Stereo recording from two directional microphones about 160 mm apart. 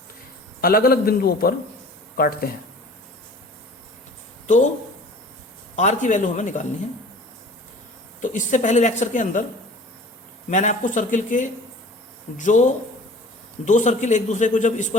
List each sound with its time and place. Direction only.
0.6 s a man's voice: 65° left (ahead or behind)
4.4 s speech: 50° left (ahead or behind)
5.7 s speech: 50° left (ahead or behind)
8.2 s speech: 55° left (ahead or behind)
10.5 s speech: 50° left (ahead or behind)